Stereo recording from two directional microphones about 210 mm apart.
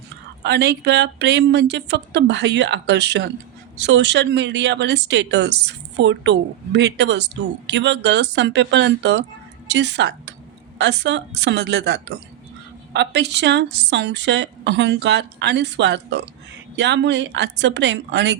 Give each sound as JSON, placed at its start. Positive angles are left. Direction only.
{"t": 0.4, "sound": "speech", "side_deg": -55}